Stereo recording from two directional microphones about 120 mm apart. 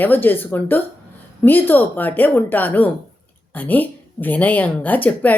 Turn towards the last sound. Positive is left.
turn(degrees=15)  # may be behind; listen again after turning